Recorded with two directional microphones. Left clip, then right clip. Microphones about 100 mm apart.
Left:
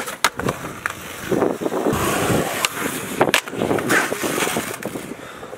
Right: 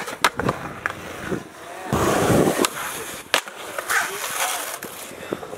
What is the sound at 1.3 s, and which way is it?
Boat, 55° left (ahead or behind).